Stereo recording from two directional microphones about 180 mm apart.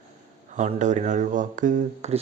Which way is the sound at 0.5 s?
40° right (ahead or behind).